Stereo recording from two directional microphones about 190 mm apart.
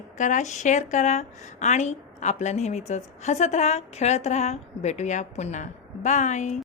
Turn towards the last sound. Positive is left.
turn(degrees=40)  # may be behind; listen again after turning